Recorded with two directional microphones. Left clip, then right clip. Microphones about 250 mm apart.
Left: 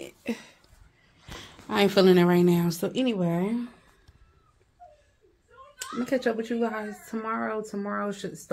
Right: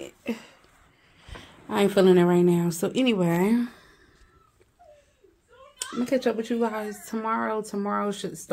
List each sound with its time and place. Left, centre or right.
0.0 s a sound: centre
1.4 s speech: centre
2.9 s speech: centre
3.2 s speech: right
5.8 s speech: centre